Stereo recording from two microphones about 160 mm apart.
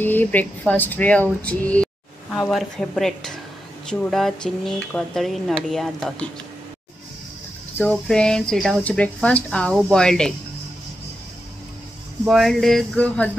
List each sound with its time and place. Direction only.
0.0 s speech: 10° left (ahead or behind)
7.7 s speech: 10° left (ahead or behind)
12.3 s speech: centre (ahead or behind)